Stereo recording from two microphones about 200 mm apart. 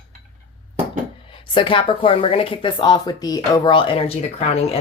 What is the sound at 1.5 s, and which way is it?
Speech, 25° left (ahead or behind).